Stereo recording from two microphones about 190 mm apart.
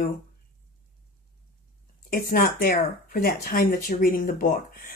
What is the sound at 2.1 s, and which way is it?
Speech, 50° left (ahead or behind).